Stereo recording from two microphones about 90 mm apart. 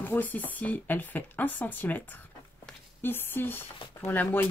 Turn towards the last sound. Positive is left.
turn(degrees=20)  # may be behind; listen again after turning